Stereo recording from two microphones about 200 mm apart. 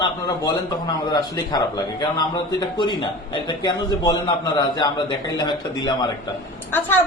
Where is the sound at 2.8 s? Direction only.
20° left (ahead or behind).